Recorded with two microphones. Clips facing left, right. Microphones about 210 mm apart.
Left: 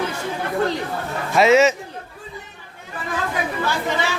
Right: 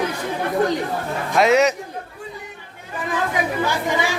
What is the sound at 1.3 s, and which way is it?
Speech, centre (ahead or behind).